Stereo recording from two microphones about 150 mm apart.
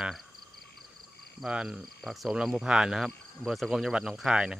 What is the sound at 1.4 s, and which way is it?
Speech, 5° right (ahead or behind).